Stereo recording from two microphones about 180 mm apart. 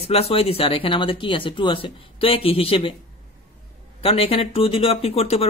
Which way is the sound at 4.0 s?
35° left (ahead or behind).